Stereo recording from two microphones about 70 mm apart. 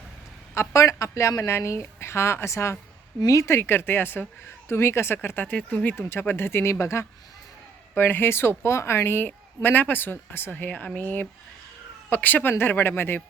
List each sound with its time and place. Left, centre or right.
0.5 s speech: left
3.2 s speech: left
3.4 s a woman's voice: left
6.1 s a woman's voice: left
7.9 s a woman's voice: left